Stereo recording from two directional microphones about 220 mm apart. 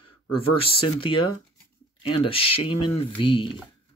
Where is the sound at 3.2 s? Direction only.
25° left (ahead or behind).